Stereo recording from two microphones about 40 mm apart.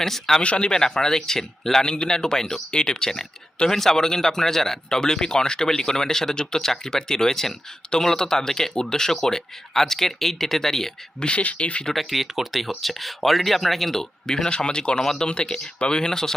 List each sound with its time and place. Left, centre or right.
0.0 s speech: centre
0.4 s speech: left
0.7 s speech: centre
1.8 s speech: left
11.2 s speech: left
11.9 s speech: centre